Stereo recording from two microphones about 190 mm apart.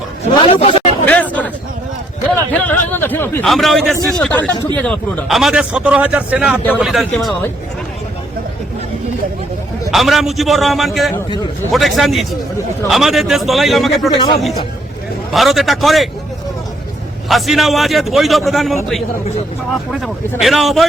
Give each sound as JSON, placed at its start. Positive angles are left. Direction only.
{"t": 0.4, "sound": "a sound", "side_deg": 30}
{"t": 1.0, "sound": "chatter", "side_deg": 10}
{"t": 2.3, "sound": "a sound", "side_deg": 10}
{"t": 3.5, "sound": "a man's voice", "side_deg": 0}
{"t": 9.9, "sound": "a man's voice", "side_deg": 0}
{"t": 17.2, "sound": "a man's voice", "side_deg": 0}
{"t": 20.4, "sound": "a man's voice", "side_deg": 0}